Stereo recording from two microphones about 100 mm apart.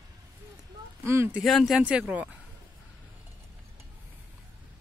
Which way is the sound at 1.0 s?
25° right (ahead or behind).